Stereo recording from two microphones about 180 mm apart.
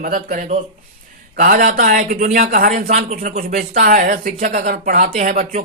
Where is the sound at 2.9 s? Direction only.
45° right (ahead or behind).